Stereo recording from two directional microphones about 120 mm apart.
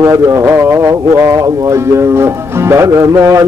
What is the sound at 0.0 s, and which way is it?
Speech, 25° right (ahead or behind).